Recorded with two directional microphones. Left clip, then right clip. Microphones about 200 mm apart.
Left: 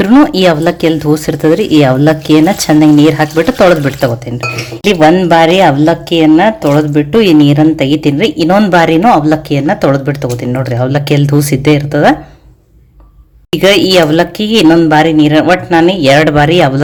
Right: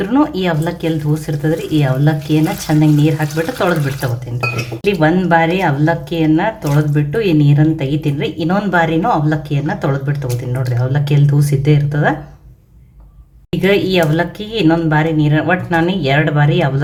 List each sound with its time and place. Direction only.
0.0 s speech: 35° left (ahead or behind)
4.8 s speech: 30° left (ahead or behind)
13.6 s speech: 35° left (ahead or behind)